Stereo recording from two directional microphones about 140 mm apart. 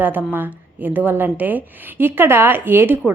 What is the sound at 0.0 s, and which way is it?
A woman's voice, 10° right (ahead or behind).